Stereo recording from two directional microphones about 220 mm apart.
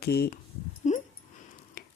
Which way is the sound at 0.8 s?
30° left (ahead or behind).